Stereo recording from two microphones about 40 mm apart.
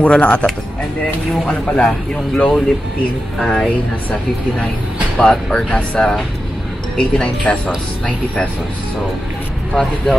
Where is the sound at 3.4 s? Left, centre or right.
Centre.